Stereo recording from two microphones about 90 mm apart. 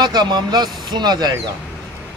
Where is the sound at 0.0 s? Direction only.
50° right (ahead or behind).